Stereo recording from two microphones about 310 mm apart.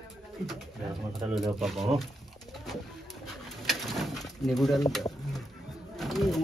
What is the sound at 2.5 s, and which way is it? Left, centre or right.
Pigeon, centre.